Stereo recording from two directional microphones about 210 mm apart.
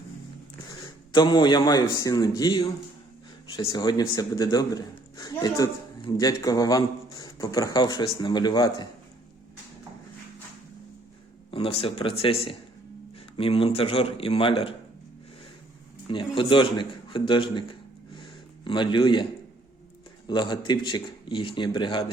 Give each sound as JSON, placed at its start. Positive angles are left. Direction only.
{"t": 1.1, "sound": "a man's voice", "side_deg": 20}
{"t": 11.5, "sound": "a man's voice", "side_deg": 25}
{"t": 16.0, "sound": "a man's voice", "side_deg": 25}
{"t": 18.2, "sound": "a sound", "side_deg": 20}
{"t": 20.2, "sound": "a man's voice", "side_deg": 20}